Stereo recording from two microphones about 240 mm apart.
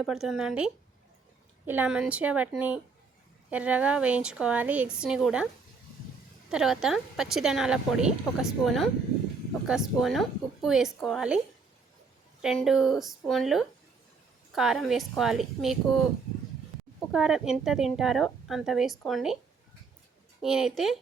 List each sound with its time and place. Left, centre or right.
0.0 s a woman's voice: centre
6.5 s a woman's voice: centre
12.4 s a woman's voice: centre
17.1 s a woman's voice: centre
20.4 s a woman's voice: centre